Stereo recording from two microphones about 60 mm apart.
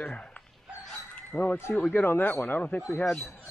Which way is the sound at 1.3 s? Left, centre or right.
Left.